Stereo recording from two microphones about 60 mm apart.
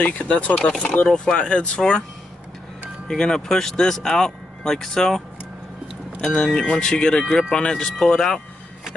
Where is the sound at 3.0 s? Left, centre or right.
Centre.